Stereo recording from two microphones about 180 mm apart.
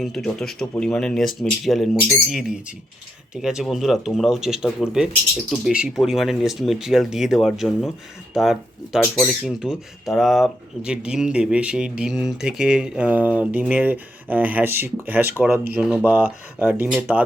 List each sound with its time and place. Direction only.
0.0 s speech: centre (ahead or behind)